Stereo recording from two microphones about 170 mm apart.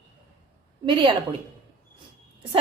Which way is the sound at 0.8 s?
30° right (ahead or behind).